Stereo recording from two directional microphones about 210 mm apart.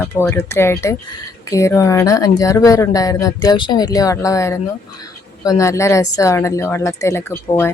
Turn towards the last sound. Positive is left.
turn(degrees=10)  # may be behind; listen again after turning